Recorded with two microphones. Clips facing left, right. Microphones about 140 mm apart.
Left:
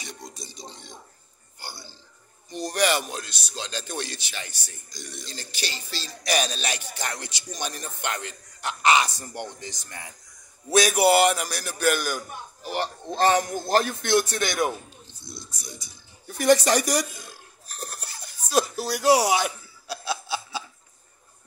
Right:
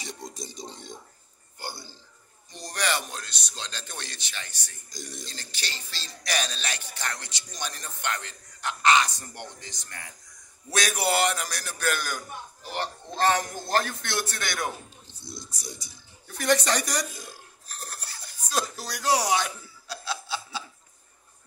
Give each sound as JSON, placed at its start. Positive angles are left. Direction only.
{"t": 0.4, "sound": "a man's voice", "side_deg": -45}
{"t": 1.6, "sound": "burping", "side_deg": -50}
{"t": 2.5, "sound": "speech", "side_deg": 10}
{"t": 4.8, "sound": "speech", "side_deg": -40}
{"t": 5.2, "sound": "speech", "side_deg": 10}
{"t": 16.3, "sound": "speech", "side_deg": 10}
{"t": 17.6, "sound": "a sound", "side_deg": 15}